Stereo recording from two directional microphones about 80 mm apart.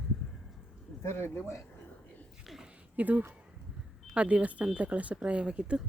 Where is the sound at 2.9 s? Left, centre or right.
Centre.